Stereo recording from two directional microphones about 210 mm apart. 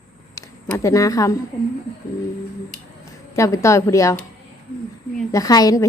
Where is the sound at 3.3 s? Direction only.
15° left (ahead or behind).